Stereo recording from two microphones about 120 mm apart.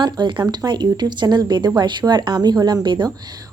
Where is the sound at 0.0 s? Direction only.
40° right (ahead or behind).